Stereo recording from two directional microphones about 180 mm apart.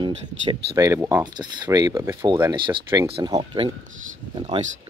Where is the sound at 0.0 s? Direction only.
25° right (ahead or behind).